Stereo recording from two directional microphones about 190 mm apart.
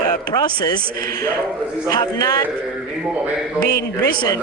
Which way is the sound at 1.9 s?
20° left (ahead or behind).